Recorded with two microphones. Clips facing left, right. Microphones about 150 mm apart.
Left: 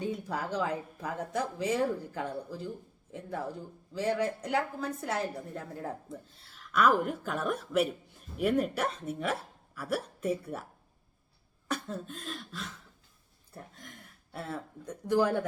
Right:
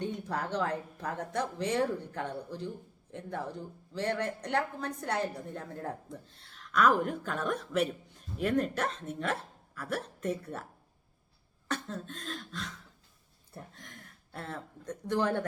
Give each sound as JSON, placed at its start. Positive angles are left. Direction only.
{"t": 0.0, "sound": "speech", "side_deg": 5}
{"t": 11.7, "sound": "speech", "side_deg": 10}